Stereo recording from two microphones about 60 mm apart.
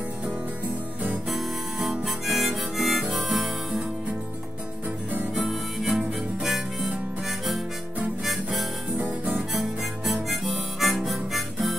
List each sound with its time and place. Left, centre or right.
1.3 s harmonica: centre
5.3 s harmonica: centre
5.9 s music: centre
7.2 s harmonica: centre
8.9 s music: right
9.5 s harmonica: centre